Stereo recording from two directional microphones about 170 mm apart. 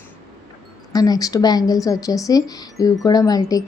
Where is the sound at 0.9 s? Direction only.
20° left (ahead or behind).